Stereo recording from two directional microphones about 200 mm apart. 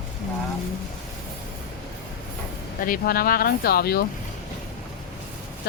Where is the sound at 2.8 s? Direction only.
45° left (ahead or behind).